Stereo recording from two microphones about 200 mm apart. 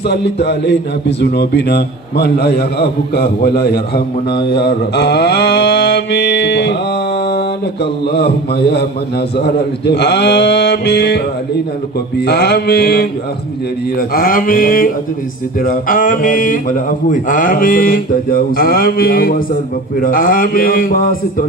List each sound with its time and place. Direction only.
0.1 s a man's voice: 55° left (ahead or behind)
12.2 s speech: 55° left (ahead or behind)
14.1 s speech: 45° left (ahead or behind)